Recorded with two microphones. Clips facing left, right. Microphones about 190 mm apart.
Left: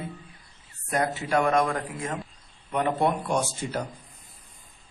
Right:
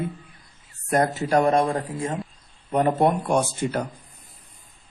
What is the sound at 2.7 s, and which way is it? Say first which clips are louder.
A man's voice: right 5 dB; 45° right (ahead or behind).